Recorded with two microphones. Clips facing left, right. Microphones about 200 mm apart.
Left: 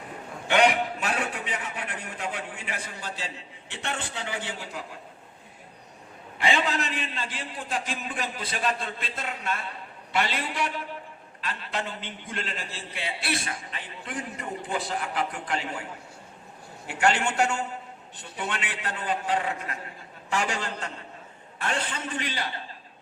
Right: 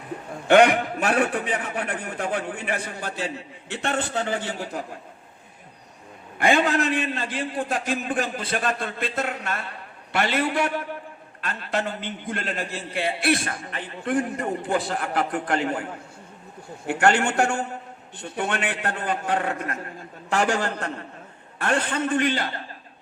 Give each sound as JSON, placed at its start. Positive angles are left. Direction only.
{"t": 0.4, "sound": "a man's voice", "side_deg": -50}
{"t": 6.4, "sound": "a man's voice", "side_deg": -50}
{"t": 16.8, "sound": "a man's voice", "side_deg": -50}